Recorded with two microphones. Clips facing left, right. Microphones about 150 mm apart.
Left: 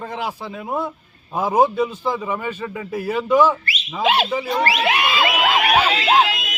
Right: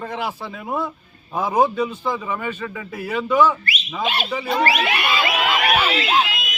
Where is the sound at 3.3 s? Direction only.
35° left (ahead or behind).